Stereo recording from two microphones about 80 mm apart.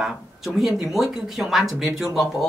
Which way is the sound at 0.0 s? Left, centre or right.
Centre.